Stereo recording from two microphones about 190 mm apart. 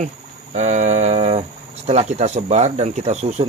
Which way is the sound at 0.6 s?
40° right (ahead or behind).